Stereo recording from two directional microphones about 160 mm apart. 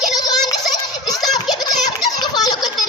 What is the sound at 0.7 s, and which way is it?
Turkey, 25° left (ahead or behind).